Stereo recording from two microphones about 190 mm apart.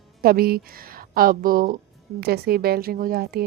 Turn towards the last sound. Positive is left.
turn(degrees=-55)  # may be behind; listen again after turning